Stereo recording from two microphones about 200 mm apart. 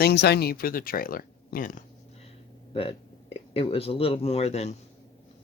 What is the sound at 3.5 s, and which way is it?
A man's voice, 30° left (ahead or behind).